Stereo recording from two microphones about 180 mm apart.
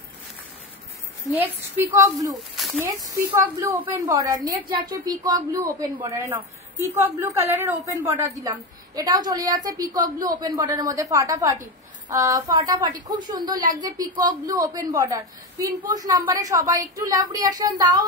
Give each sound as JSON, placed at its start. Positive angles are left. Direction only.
{"t": 1.3, "sound": "a woman's voice", "side_deg": -10}
{"t": 2.5, "sound": "a sound", "side_deg": 0}
{"t": 2.8, "sound": "a woman's voice", "side_deg": -15}